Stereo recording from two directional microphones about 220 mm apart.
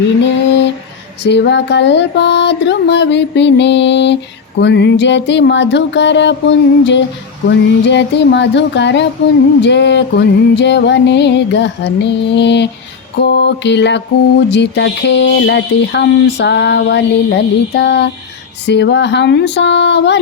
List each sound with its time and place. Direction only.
0.2 s mantra: 55° left (ahead or behind)